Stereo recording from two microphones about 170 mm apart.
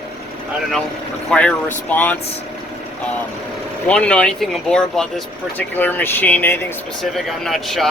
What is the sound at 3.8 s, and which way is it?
Speech, 5° left (ahead or behind).